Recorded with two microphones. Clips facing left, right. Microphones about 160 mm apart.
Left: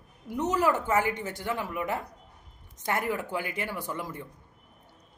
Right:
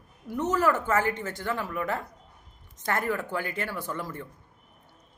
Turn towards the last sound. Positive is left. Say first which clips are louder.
# right 1 dB
turn(degrees=15)  # may be behind; listen again after turning